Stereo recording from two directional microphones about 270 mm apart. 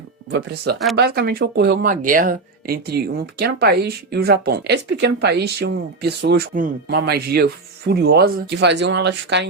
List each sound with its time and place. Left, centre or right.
0.3 s a woman's voice: right